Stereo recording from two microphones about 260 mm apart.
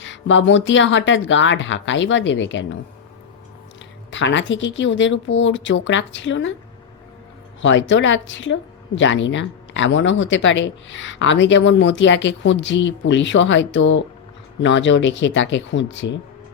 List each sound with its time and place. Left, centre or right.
0.0 s speech: left
4.1 s speech: left
7.6 s speech: left